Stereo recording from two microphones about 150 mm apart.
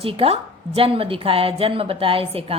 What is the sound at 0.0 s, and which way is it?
Speech, 40° right (ahead or behind).